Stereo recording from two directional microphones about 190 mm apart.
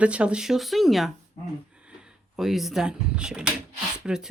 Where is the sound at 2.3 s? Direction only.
Centre (ahead or behind).